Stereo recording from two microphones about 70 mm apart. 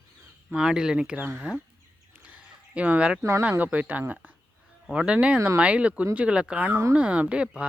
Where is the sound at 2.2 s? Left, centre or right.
Centre.